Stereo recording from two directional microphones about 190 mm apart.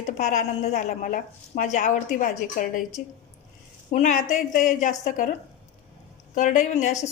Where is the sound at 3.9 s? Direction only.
40° left (ahead or behind).